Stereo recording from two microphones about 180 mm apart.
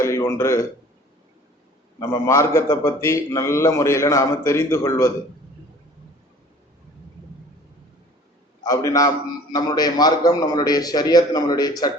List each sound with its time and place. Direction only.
0.0 s a man's voice: 15° left (ahead or behind)
2.0 s a man's voice: 15° left (ahead or behind)
8.6 s a man's voice: 20° left (ahead or behind)